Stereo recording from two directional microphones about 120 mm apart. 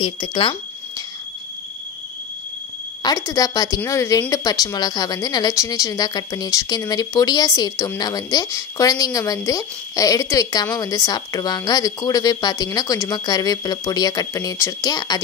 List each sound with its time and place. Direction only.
0.0 s speech: 45° left (ahead or behind)
3.0 s a woman's voice: 30° left (ahead or behind)